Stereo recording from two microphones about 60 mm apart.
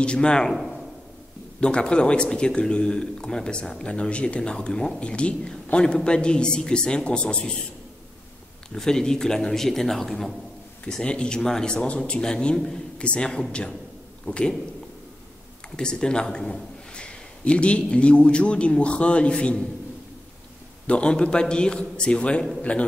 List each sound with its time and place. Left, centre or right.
0.0 s speech: centre
0.6 s a sound: centre
1.6 s speech: centre
8.7 s speech: centre
10.9 s a man's voice: centre
15.7 s speech: centre
20.8 s a man's voice: centre